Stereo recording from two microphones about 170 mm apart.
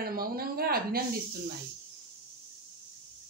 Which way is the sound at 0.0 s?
60° right (ahead or behind).